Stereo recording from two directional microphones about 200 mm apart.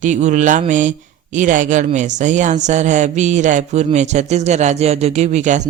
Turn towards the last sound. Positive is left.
turn(degrees=-35)  # may be behind; listen again after turning